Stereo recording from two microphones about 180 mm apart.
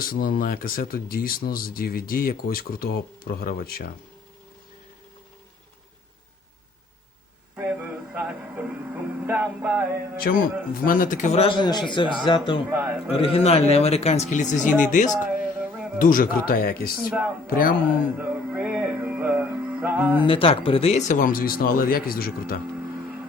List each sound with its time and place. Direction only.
0.0 s speech: 55° left (ahead or behind)
7.5 s music: 10° right (ahead or behind)
10.3 s speech: 55° left (ahead or behind); by 12.5 s 25° left (ahead or behind)
12.7 s speech: 10° right (ahead or behind)
13.1 s speech: 30° left (ahead or behind)
15.2 s a sound: 10° right (ahead or behind)
16.0 s speech: 50° left (ahead or behind)
17.1 s speech: 5° right (ahead or behind)
17.4 s speech: 50° left (ahead or behind)
18.2 s music: 5° right (ahead or behind)
20.1 s speech: 30° left (ahead or behind); by 22.6 s 55° left (ahead or behind)